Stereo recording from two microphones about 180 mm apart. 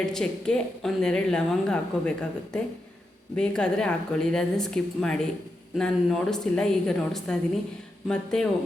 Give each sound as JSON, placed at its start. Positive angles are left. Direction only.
{"t": 0.0, "sound": "a woman's voice", "side_deg": 5}